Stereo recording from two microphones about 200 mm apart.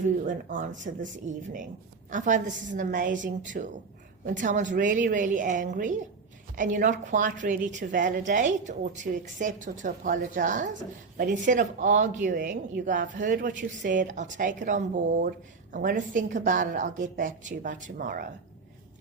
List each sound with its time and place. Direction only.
0.3 s speech: 40° right (ahead or behind)